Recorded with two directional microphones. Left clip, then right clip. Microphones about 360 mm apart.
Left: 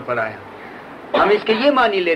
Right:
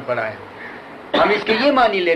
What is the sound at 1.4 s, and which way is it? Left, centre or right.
Speech, left.